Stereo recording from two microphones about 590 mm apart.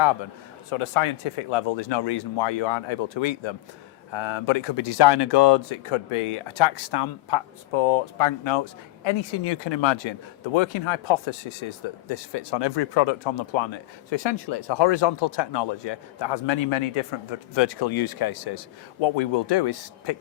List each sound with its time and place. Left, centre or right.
0.7 s speech: left